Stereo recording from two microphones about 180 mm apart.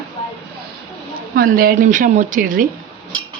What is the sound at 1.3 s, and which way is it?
Speech, 55° right (ahead or behind).